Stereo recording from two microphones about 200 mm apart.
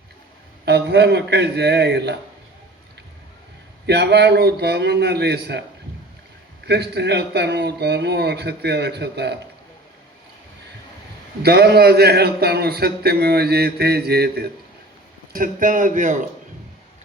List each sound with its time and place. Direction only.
0.6 s a man's voice: 55° right (ahead or behind)
3.8 s a man's voice: 55° right (ahead or behind)
6.7 s a man's voice: 55° right (ahead or behind)
11.4 s a man's voice: 55° right (ahead or behind)